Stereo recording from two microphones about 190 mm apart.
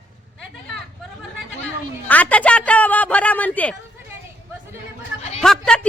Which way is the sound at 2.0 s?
10° left (ahead or behind).